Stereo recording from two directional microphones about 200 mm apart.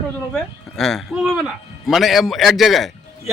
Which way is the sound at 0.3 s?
Centre (ahead or behind).